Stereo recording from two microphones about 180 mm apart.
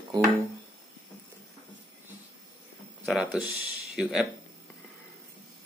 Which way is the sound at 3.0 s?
Centre (ahead or behind).